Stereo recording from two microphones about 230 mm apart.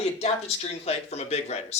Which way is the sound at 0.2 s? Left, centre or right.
Left.